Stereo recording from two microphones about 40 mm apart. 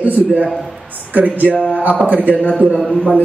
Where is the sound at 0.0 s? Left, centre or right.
Right.